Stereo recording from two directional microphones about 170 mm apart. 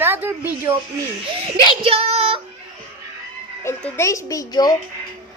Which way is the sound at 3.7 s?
15° left (ahead or behind).